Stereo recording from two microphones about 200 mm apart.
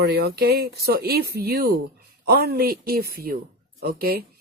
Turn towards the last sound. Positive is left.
turn(degrees=-50)  # may be behind; listen again after turning